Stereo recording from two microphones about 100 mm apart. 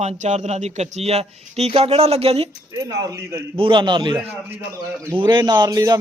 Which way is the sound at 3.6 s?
55° right (ahead or behind).